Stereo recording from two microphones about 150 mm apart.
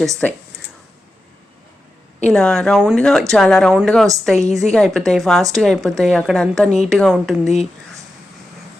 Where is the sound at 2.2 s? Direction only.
5° left (ahead or behind).